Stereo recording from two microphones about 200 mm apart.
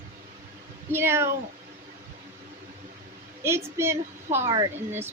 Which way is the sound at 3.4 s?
15° right (ahead or behind).